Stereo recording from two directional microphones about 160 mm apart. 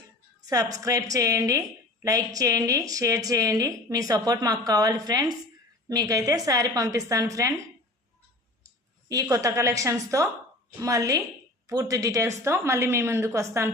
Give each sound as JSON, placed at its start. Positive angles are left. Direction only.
{"t": 0.4, "sound": "a woman's voice", "side_deg": -20}
{"t": 8.6, "sound": "clicking", "side_deg": -20}
{"t": 9.3, "sound": "a woman's voice", "side_deg": -20}